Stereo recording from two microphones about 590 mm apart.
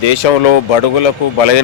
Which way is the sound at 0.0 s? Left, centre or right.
Left.